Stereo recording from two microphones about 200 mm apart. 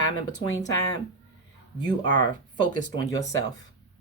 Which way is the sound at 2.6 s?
15° left (ahead or behind).